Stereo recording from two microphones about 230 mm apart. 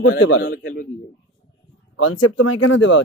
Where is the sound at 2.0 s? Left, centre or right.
Left.